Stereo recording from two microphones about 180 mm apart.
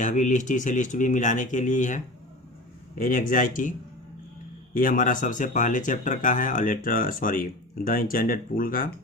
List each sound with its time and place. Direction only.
0.0 s speech: 45° left (ahead or behind)
3.0 s speech: 50° left (ahead or behind)
4.8 s speech: 50° left (ahead or behind)